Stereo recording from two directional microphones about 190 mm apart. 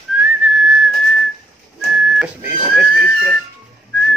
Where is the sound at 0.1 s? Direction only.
5° right (ahead or behind).